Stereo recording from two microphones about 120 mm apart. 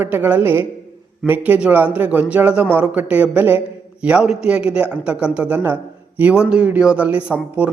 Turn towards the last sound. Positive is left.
turn(degrees=-15)  # may be behind; listen again after turning